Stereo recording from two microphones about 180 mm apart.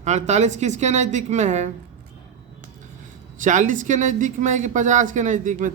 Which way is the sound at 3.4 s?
45° right (ahead or behind).